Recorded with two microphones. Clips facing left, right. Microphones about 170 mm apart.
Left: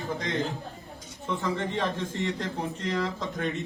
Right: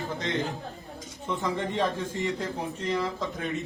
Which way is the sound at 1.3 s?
15° right (ahead or behind).